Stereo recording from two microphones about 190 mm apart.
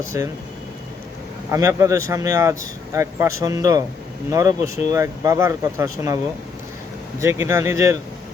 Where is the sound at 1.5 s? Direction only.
15° right (ahead or behind).